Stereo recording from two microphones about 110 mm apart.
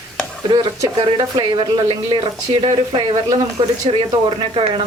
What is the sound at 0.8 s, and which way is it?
Speech, 45° right (ahead or behind).